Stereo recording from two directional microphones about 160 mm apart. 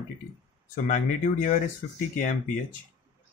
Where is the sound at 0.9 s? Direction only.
50° left (ahead or behind).